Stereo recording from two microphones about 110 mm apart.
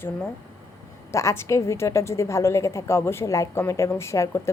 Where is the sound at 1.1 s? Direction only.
25° left (ahead or behind).